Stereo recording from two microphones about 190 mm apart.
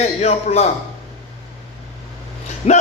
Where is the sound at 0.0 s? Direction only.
35° left (ahead or behind).